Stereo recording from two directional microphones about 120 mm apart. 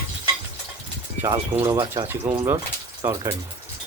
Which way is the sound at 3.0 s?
25° right (ahead or behind).